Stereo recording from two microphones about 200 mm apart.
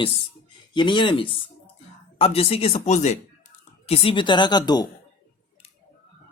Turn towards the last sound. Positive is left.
turn(degrees=20)  # may be behind; listen again after turning